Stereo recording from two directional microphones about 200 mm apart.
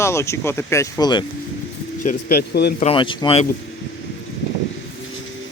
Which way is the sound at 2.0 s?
45° left (ahead or behind).